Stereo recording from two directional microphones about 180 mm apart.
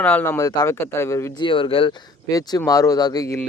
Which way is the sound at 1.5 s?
30° left (ahead or behind).